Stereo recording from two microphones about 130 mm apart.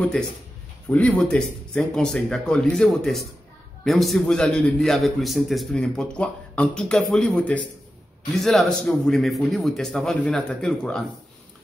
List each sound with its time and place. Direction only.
0.2 s a man's voice: 5° left (ahead or behind)